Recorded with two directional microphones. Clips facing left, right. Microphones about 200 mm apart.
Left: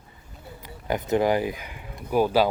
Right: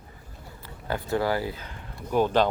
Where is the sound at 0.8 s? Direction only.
20° left (ahead or behind).